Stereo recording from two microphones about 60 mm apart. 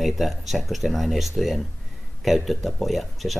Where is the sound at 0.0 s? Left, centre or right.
Centre.